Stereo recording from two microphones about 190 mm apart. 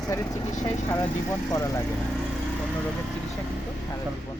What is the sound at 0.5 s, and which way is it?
Speech, 40° left (ahead or behind).